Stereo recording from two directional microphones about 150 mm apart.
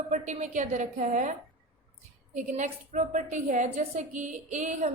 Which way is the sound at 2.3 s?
55° right (ahead or behind).